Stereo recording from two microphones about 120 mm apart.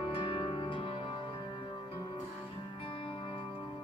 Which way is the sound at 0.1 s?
45° left (ahead or behind).